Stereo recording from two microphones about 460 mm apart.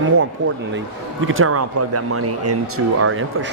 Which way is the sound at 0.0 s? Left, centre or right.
Right.